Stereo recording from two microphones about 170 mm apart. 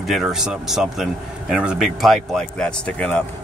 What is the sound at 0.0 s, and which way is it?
Speech, centre (ahead or behind).